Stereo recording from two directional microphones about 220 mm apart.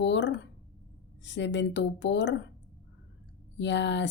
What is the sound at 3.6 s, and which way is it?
Speech, 55° left (ahead or behind).